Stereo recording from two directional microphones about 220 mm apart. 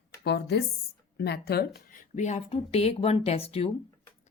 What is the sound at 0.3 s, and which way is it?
Speech, 50° left (ahead or behind).